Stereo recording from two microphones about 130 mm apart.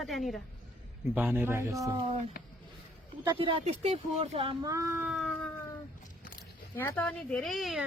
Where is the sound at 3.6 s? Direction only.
55° right (ahead or behind).